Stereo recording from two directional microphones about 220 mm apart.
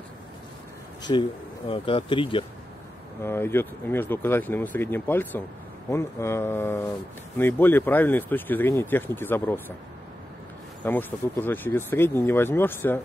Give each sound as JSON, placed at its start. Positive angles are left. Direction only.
{"t": 1.1, "sound": "speech", "side_deg": 25}
{"t": 3.3, "sound": "speech", "side_deg": 10}
{"t": 10.8, "sound": "speech", "side_deg": 10}